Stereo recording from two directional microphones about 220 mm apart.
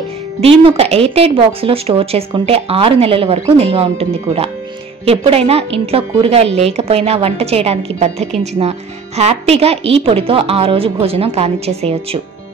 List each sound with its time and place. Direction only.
0.4 s a woman's voice: 25° right (ahead or behind)